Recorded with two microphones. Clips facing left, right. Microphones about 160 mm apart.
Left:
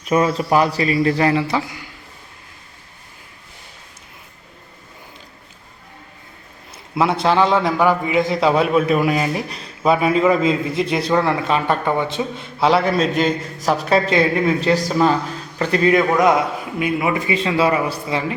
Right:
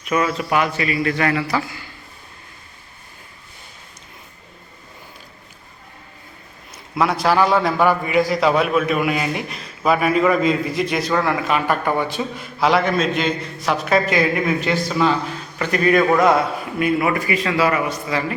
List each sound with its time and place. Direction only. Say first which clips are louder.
0.0 s a man's voice: left 3 dB; 30° left (ahead or behind)
6.9 s a man's voice: left 1 dB; 25° left (ahead or behind)